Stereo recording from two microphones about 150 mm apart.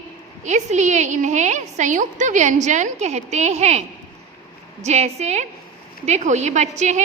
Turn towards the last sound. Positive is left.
turn(degrees=-50)  # may be behind; listen again after turning